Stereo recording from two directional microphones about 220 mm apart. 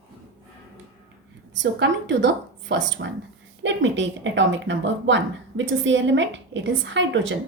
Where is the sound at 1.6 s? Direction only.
55° right (ahead or behind).